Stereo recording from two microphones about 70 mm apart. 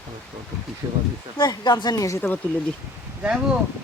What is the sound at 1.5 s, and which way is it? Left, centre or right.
Speech, left.